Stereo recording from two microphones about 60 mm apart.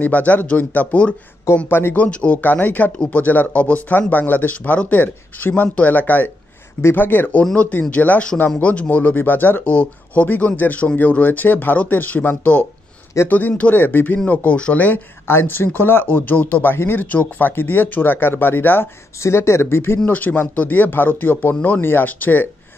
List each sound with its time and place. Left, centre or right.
0.0 s speech: left
1.7 s speech: left
2.0 s speech: centre
2.4 s speech: left
15.2 s speech: left
19.2 s speech: left
20.1 s speech: left
21.5 s speech: left
21.8 s speech: left